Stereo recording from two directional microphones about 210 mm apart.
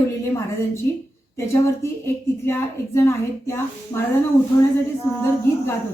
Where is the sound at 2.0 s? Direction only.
10° left (ahead or behind).